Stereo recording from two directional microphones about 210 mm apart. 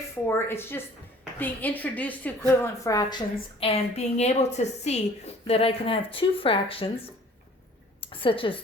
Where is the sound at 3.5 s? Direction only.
30° left (ahead or behind).